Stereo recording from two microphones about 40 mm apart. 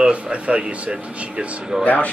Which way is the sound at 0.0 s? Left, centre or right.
Right.